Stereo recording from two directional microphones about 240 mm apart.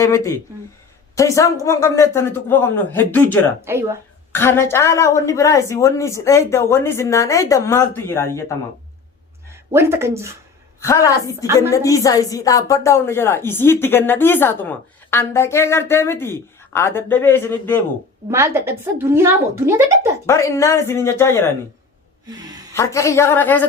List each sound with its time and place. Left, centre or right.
0.0 s speech: centre
3.6 s a woman's voice: centre
4.3 s speech: centre
9.7 s a woman's voice: centre
10.8 s speech: centre
18.3 s a woman's voice: centre
20.2 s speech: centre
22.3 s a sound: centre
22.7 s speech: centre